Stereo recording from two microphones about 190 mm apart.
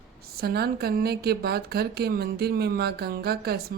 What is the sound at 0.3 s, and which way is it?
Speech, 55° right (ahead or behind).